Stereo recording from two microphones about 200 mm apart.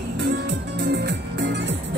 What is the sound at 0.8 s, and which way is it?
Music, 55° right (ahead or behind).